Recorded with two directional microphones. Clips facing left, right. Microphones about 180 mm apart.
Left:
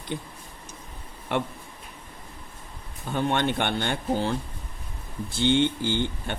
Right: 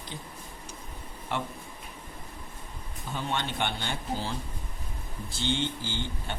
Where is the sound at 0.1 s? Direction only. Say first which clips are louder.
Left 11 dB; 60° left (ahead or behind).